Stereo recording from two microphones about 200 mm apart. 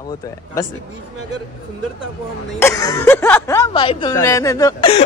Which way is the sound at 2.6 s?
15° left (ahead or behind).